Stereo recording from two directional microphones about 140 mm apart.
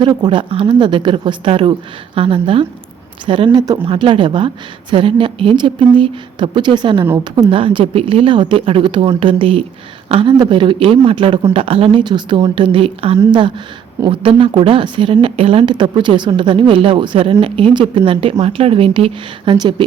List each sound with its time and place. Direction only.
0.0 s a woman's voice: 30° right (ahead or behind)